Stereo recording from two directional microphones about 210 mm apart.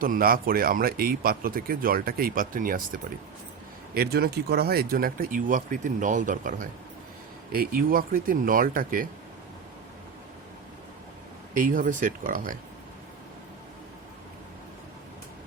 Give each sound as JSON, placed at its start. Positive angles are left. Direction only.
{"t": 0.0, "sound": "speech", "side_deg": -45}
{"t": 11.5, "sound": "speech", "side_deg": -40}